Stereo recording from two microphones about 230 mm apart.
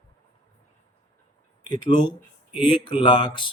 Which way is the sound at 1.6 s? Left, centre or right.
Centre.